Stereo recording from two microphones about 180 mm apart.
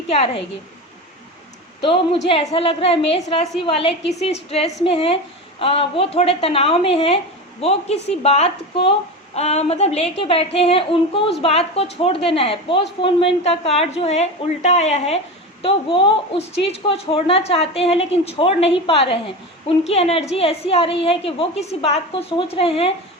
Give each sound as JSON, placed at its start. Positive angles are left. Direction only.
{"t": 0.1, "sound": "a woman's voice", "side_deg": 35}
{"t": 1.8, "sound": "a woman's voice", "side_deg": 30}